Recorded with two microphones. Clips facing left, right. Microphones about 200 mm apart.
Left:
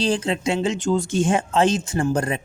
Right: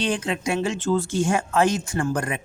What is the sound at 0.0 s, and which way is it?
Speech, 30° left (ahead or behind).